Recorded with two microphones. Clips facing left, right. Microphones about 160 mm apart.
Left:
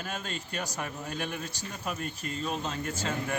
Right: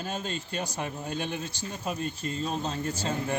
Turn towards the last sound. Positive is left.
turn(degrees=-30)  # may be behind; listen again after turning